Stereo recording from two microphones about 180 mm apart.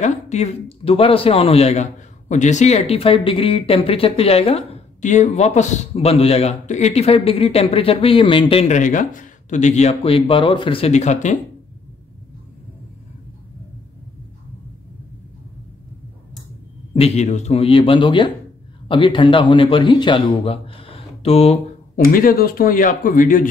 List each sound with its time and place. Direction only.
0.0 s a man's voice: 40° left (ahead or behind)
17.0 s a man's voice: 40° left (ahead or behind)
21.9 s a man's voice: 55° left (ahead or behind)